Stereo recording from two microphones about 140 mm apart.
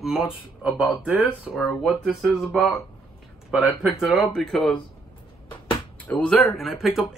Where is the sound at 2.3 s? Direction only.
5° left (ahead or behind).